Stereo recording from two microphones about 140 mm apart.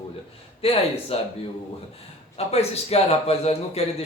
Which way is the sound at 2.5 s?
45° left (ahead or behind).